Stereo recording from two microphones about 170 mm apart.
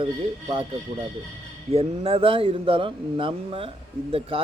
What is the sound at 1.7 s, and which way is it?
Speech, 35° right (ahead or behind).